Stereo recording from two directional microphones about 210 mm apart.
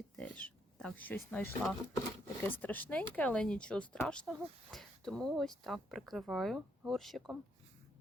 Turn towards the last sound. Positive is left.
turn(degrees=0)  # may be behind; listen again after turning